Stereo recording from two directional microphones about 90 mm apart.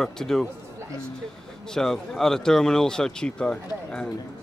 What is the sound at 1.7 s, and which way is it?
Speech, 5° left (ahead or behind).